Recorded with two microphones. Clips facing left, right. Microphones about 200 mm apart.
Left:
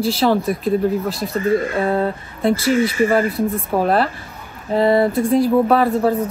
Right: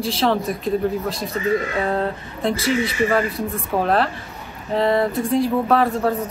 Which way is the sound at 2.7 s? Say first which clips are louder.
Left 4 dB; 45° left (ahead or behind).